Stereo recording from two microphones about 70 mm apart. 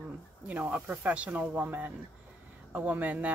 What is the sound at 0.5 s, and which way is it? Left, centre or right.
Speech, right.